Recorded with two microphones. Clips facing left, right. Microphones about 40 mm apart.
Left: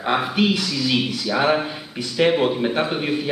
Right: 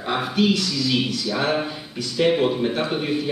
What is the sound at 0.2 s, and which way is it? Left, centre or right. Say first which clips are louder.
A man's voice: even; left.